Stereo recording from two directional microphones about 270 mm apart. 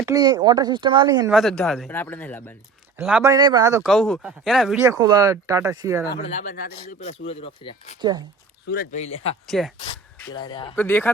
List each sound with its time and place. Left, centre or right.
0.0 s speech: centre
1.3 s speech: centre
3.0 s speech: centre
3.3 s speech: centre
6.1 s speech: left
8.6 s speech: left
9.5 s speech: centre
10.3 s speech: centre
10.8 s speech: centre